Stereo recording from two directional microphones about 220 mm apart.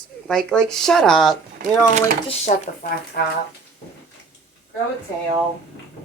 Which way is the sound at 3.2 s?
45° left (ahead or behind).